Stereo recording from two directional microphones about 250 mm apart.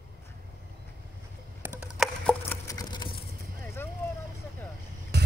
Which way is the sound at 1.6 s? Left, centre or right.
Centre.